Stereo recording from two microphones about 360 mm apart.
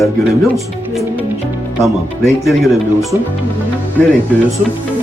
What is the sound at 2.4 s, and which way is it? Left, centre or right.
Speech, centre.